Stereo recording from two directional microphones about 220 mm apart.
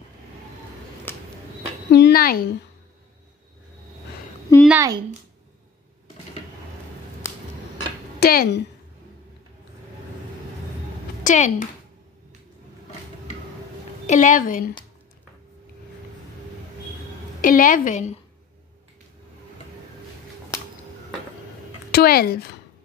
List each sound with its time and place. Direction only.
1.1 s a sound: 10° left (ahead or behind)
1.9 s speech: 50° left (ahead or behind)
4.6 s a woman's voice: 15° right (ahead or behind)
8.2 s speech: 45° left (ahead or behind)
11.2 s a woman's voice: 35° left (ahead or behind)
14.0 s a woman's voice: 35° left (ahead or behind)
17.4 s a woman's voice: 40° left (ahead or behind)
21.9 s speech: 45° left (ahead or behind)